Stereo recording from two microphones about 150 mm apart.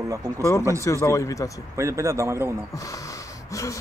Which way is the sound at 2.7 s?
20° left (ahead or behind).